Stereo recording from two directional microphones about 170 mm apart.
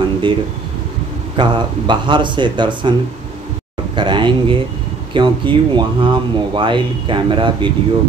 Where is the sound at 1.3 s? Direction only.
30° right (ahead or behind).